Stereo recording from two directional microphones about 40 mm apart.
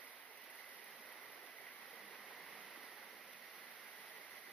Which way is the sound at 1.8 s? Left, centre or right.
Left.